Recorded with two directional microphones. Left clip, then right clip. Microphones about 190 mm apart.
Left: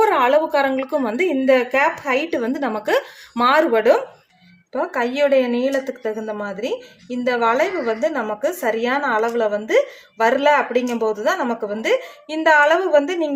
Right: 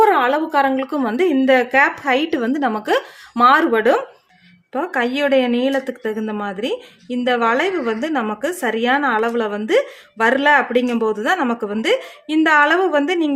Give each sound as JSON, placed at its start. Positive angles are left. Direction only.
{"t": 0.0, "sound": "a woman's voice", "side_deg": -15}